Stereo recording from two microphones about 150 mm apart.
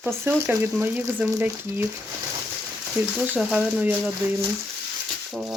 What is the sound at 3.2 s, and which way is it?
Speech, 10° right (ahead or behind).